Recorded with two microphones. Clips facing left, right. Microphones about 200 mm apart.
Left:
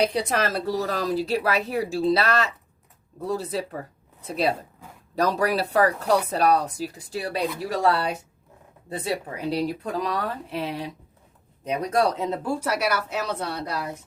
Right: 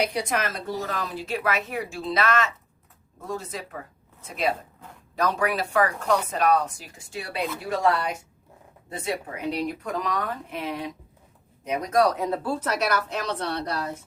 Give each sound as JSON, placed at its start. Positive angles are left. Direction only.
{"t": 0.0, "sound": "speech", "side_deg": 30}